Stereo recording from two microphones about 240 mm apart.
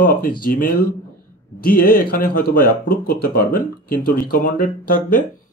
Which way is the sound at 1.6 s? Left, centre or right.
Left.